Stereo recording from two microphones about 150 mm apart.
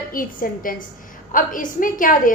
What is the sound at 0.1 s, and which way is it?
A woman's voice, 70° left (ahead or behind).